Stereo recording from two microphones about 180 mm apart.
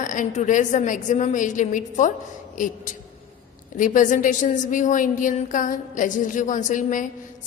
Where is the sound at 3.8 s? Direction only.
45° left (ahead or behind).